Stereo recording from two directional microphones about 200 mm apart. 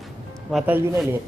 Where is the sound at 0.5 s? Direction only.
10° right (ahead or behind).